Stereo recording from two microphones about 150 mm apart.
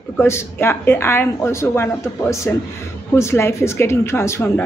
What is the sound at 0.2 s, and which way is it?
Speech, 15° left (ahead or behind).